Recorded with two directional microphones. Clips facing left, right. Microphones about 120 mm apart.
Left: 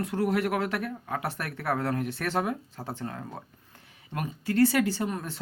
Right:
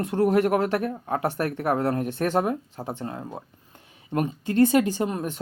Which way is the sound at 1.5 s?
20° right (ahead or behind).